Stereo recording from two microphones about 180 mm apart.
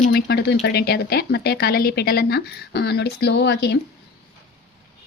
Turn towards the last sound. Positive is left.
turn(degrees=70)  # may be behind; listen again after turning